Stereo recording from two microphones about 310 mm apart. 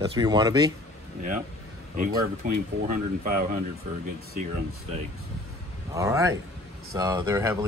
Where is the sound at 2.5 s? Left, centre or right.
Right.